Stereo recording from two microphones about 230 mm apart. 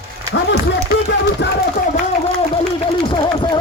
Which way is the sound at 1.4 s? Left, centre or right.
Left.